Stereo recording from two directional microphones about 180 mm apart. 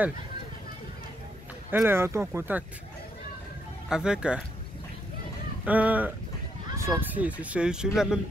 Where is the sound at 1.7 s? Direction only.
10° right (ahead or behind).